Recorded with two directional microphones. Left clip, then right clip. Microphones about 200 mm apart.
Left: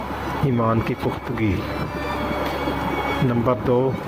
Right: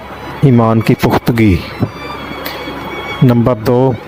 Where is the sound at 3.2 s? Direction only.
60° right (ahead or behind).